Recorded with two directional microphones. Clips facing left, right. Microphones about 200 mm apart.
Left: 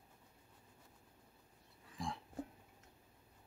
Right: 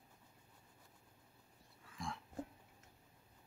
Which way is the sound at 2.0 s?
35° left (ahead or behind).